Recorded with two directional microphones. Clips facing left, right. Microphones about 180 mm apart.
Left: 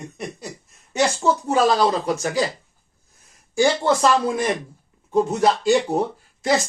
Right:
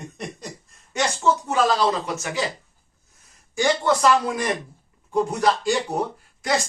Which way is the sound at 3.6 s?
30° left (ahead or behind).